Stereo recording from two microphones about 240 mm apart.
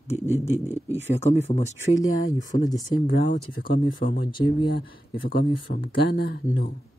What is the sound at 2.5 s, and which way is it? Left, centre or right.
Speech, centre.